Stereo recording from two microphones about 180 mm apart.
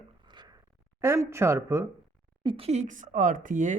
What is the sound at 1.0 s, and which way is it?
Speech, 15° right (ahead or behind).